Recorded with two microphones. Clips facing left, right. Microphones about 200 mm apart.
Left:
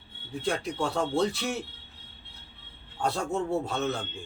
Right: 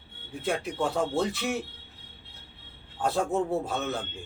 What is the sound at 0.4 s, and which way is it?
Speech, centre (ahead or behind).